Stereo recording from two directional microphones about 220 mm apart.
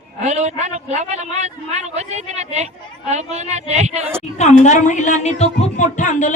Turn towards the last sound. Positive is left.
turn(degrees=35)  # may be behind; listen again after turning